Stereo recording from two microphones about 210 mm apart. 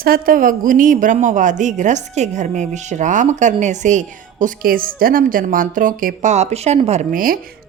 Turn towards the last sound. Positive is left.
turn(degrees=-40)  # may be behind; listen again after turning